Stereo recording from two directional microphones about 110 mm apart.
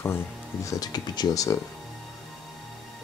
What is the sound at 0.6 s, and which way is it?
Speech, 35° left (ahead or behind).